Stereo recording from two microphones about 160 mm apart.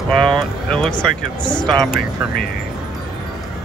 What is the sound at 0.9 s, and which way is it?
Speech, 25° left (ahead or behind).